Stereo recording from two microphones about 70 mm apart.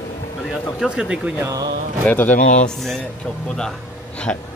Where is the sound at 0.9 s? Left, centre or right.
Centre.